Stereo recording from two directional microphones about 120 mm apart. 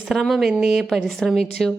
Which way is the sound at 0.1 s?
Centre (ahead or behind).